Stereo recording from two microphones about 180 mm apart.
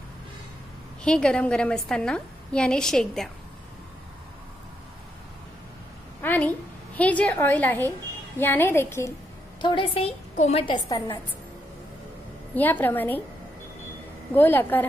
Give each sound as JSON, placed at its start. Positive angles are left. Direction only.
{"t": 1.0, "sound": "a woman's voice", "side_deg": 5}
{"t": 6.2, "sound": "a sound", "side_deg": 10}
{"t": 7.0, "sound": "a woman's voice", "side_deg": 10}
{"t": 9.6, "sound": "a woman's voice", "side_deg": 25}
{"t": 12.5, "sound": "a woman's voice", "side_deg": 10}
{"t": 14.3, "sound": "a woman's voice", "side_deg": 10}